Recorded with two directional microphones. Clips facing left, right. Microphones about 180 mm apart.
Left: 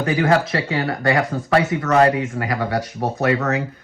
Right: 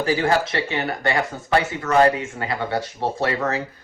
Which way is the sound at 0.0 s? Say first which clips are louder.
Left 2 dB; 30° right (ahead or behind).